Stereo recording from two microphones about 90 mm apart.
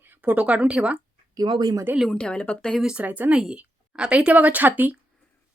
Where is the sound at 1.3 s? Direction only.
50° right (ahead or behind).